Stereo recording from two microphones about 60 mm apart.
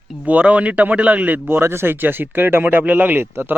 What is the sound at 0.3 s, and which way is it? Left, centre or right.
A man's voice, right.